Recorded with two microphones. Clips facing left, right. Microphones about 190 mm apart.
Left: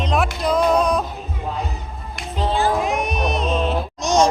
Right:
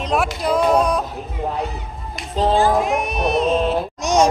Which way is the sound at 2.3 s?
40° right (ahead or behind).